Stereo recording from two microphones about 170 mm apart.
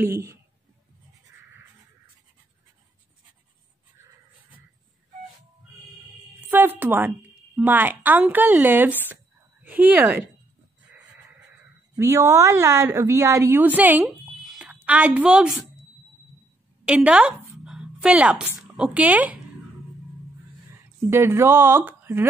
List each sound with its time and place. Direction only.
0.0 s a woman's voice: 15° right (ahead or behind)
6.5 s a woman's voice: 10° right (ahead or behind)
11.9 s speech: 15° right (ahead or behind)
16.8 s speech: 5° right (ahead or behind)
21.1 s a woman's voice: 15° right (ahead or behind)